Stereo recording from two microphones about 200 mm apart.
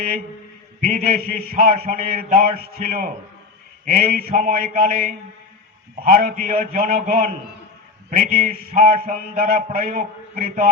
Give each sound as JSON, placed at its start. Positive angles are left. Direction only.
{"t": 0.8, "sound": "a man's voice", "side_deg": -45}